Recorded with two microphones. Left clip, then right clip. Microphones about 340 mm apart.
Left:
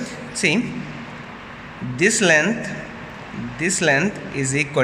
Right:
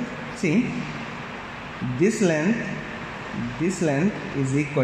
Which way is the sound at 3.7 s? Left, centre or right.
Left.